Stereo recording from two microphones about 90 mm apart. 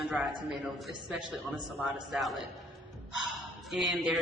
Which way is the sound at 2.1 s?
Centre (ahead or behind).